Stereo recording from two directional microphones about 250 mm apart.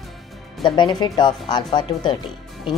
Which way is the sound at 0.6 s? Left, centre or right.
Centre.